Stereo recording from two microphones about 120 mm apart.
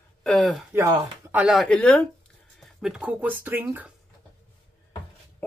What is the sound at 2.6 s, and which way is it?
Speech, 5° right (ahead or behind).